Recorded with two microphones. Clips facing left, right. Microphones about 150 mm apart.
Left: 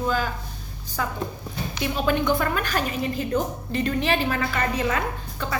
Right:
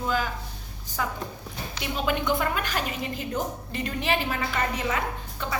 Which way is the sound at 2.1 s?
15° right (ahead or behind).